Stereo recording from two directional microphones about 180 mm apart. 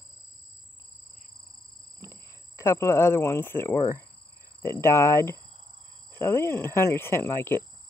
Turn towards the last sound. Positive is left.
turn(degrees=15)  # may be behind; listen again after turning